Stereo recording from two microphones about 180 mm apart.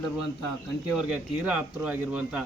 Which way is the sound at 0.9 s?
5° right (ahead or behind).